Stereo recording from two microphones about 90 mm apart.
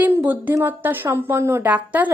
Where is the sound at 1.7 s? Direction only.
15° right (ahead or behind).